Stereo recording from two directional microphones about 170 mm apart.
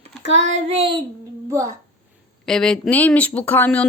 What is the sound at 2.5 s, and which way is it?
Speech, 5° left (ahead or behind).